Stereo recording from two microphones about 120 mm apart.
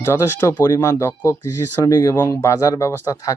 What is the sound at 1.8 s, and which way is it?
Speech, 30° left (ahead or behind).